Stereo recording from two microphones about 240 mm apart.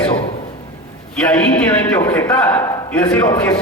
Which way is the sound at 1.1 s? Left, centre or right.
Centre.